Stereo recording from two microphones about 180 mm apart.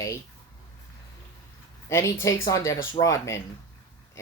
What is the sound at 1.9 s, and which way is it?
Speech, 15° left (ahead or behind).